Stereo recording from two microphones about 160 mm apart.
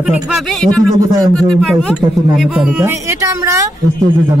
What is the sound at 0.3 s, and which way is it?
Speech, centre (ahead or behind).